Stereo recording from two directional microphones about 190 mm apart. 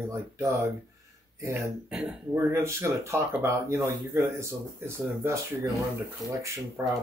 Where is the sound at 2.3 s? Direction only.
15° right (ahead or behind).